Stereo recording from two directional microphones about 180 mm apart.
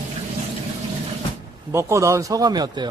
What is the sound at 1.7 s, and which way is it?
Speech, 15° right (ahead or behind).